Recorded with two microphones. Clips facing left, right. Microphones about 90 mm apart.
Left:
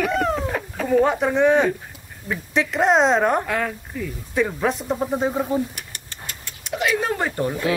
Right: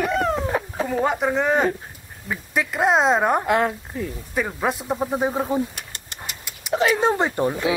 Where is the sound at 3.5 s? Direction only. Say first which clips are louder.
Right 4 dB; 30° right (ahead or behind).